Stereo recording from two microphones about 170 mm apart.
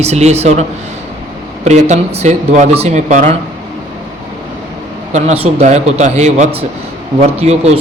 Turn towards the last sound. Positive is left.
turn(degrees=-40)  # may be behind; listen again after turning